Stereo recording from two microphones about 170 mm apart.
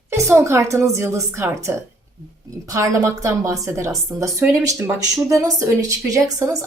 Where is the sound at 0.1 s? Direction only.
15° right (ahead or behind).